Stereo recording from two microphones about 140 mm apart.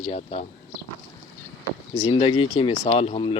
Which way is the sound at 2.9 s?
40° left (ahead or behind).